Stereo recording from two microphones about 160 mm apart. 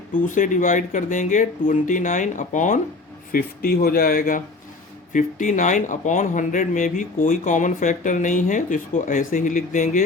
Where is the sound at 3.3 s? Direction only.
70° left (ahead or behind).